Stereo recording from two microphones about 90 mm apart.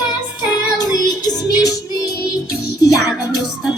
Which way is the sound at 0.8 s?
45° left (ahead or behind).